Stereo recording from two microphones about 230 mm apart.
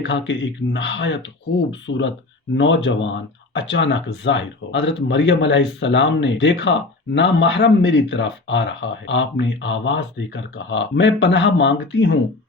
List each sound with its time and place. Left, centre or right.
0.0 s speech: left